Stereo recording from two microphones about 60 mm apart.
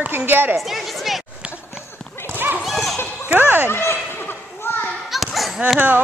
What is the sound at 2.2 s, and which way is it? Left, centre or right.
Horse, right.